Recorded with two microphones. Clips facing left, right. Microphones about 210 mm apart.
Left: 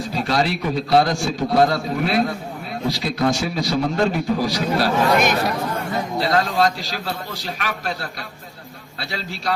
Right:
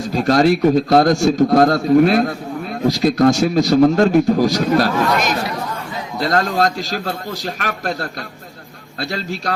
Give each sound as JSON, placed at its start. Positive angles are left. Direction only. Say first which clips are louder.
{"t": 0.1, "sound": "a man's voice", "louder": "right 9 dB", "side_deg": -45}
{"t": 5.1, "sound": "speech", "louder": "left 1 dB", "side_deg": 55}
{"t": 6.1, "sound": "a man's voice", "louder": "right 3 dB", "side_deg": -45}